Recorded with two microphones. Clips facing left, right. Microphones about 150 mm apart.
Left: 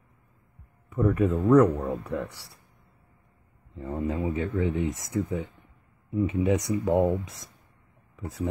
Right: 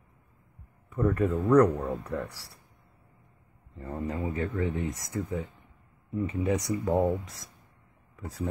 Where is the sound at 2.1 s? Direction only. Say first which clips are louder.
Left 2 dB; 20° left (ahead or behind).